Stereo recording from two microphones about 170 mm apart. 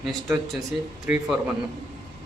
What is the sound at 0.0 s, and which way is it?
Speech, centre (ahead or behind).